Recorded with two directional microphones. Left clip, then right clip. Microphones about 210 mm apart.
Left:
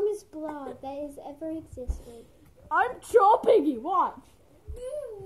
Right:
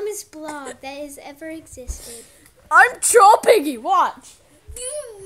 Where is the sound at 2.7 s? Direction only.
40° right (ahead or behind).